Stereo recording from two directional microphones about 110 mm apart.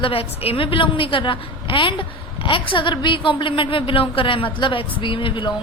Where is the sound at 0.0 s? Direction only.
60° left (ahead or behind).